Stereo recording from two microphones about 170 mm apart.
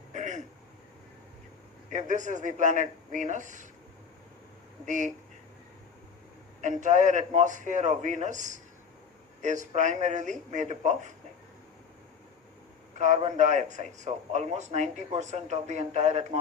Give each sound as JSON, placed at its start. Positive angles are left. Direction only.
{"t": 0.1, "sound": "throat clearing", "side_deg": -45}
{"t": 1.9, "sound": "a man's voice", "side_deg": -45}
{"t": 4.9, "sound": "a man's voice", "side_deg": -45}
{"t": 6.6, "sound": "a man's voice", "side_deg": -45}
{"t": 13.0, "sound": "a man's voice", "side_deg": -45}